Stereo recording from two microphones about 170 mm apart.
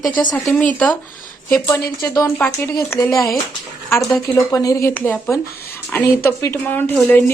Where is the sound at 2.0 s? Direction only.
15° left (ahead or behind).